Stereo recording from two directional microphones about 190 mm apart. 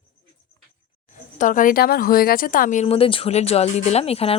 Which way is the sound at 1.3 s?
45° left (ahead or behind).